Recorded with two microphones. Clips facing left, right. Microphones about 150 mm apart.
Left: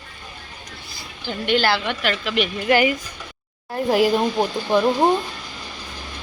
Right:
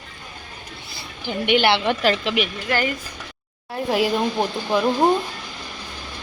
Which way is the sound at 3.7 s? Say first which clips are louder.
Left 3 dB; centre (ahead or behind).